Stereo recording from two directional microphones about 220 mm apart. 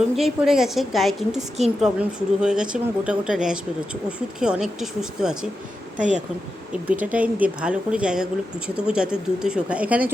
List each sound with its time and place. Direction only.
0.2 s speech: centre (ahead or behind)
6.0 s speech: 35° right (ahead or behind)
7.0 s speech: 5° right (ahead or behind)